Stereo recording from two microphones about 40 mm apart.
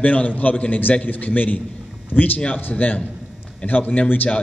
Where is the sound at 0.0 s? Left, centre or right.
Left.